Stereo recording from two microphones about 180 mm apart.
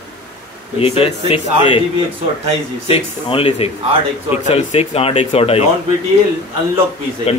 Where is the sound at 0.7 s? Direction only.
30° left (ahead or behind).